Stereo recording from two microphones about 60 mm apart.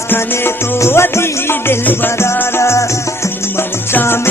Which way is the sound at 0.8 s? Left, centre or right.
Left.